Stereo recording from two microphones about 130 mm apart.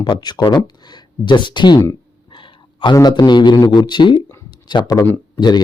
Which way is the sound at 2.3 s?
40° left (ahead or behind).